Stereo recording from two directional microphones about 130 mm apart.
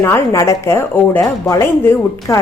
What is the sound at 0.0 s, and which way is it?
A woman's voice, 20° left (ahead or behind).